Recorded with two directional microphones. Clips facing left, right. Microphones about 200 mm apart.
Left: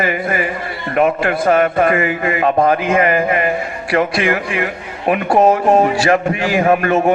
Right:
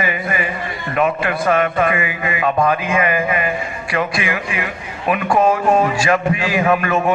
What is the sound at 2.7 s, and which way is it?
A man's voice, 50° left (ahead or behind).